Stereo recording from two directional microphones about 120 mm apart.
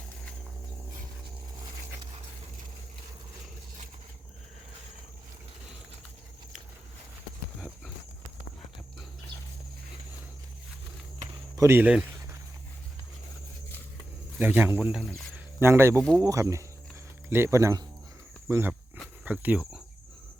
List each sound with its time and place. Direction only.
11.5 s speech: 20° right (ahead or behind)
14.3 s speech: 15° right (ahead or behind)